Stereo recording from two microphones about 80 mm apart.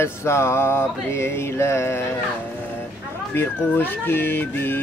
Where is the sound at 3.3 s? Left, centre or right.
Left.